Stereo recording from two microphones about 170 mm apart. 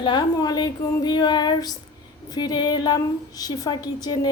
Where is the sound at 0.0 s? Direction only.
25° left (ahead or behind).